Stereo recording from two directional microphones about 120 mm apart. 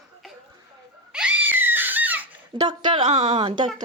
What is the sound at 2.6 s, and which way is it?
Speech, 40° right (ahead or behind).